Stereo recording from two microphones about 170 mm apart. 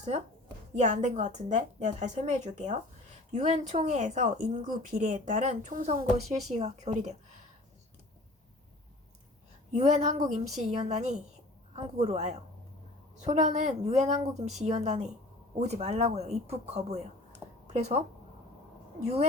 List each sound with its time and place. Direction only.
0.7 s speech: 45° right (ahead or behind)
9.7 s a woman's voice: 45° right (ahead or behind)